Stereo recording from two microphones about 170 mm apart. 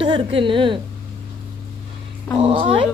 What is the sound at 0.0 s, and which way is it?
Speech, 30° right (ahead or behind).